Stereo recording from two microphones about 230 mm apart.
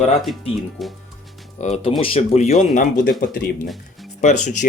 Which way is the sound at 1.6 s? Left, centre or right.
Left.